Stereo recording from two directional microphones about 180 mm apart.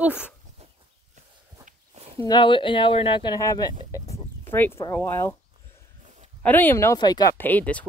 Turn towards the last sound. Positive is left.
turn(degrees=10)  # may be behind; listen again after turning